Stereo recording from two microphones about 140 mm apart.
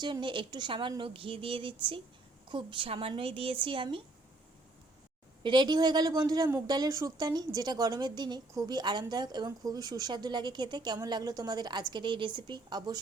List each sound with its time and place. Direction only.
0.0 s a woman's voice: 35° right (ahead or behind)
5.4 s a woman's voice: 35° right (ahead or behind)